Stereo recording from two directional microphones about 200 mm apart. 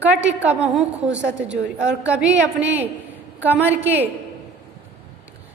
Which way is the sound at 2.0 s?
5° right (ahead or behind).